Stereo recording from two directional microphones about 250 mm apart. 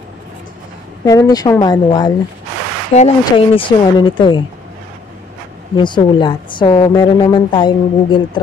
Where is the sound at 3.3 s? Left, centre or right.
Centre.